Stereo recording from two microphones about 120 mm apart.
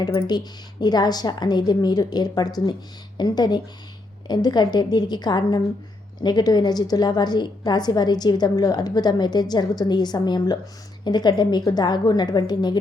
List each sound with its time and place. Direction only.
0.2 s a woman's voice: 35° left (ahead or behind)